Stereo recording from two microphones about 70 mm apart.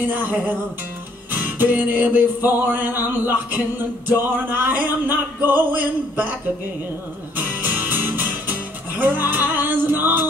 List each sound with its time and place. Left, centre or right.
0.1 s music: right
7.6 s music: right